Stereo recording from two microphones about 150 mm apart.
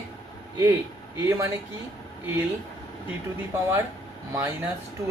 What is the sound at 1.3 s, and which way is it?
Speech, 20° right (ahead or behind).